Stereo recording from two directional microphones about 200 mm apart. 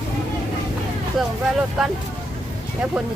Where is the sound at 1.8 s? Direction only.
Centre (ahead or behind).